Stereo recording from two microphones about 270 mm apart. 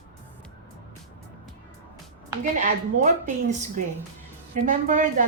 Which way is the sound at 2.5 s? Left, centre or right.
Right.